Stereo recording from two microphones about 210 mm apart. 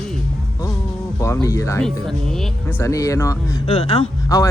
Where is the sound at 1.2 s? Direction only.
15° left (ahead or behind).